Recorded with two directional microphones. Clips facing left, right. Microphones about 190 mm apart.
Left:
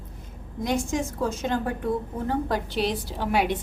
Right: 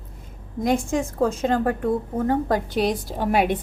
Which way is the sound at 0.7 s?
55° right (ahead or behind).